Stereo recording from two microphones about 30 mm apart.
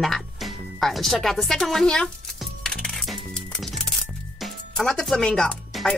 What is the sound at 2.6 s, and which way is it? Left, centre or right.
Music, left.